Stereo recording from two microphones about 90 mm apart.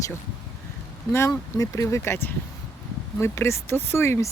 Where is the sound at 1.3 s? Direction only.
40° left (ahead or behind).